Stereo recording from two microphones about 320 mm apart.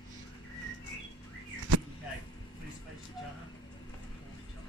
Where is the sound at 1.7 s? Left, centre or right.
Right.